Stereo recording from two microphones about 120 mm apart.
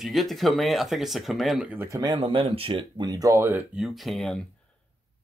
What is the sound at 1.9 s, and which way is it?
Speech, 30° right (ahead or behind).